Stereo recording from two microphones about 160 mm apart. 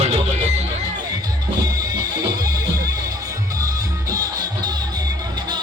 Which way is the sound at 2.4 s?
25° right (ahead or behind).